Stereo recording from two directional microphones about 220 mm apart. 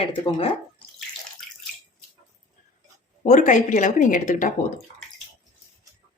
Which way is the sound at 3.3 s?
35° left (ahead or behind).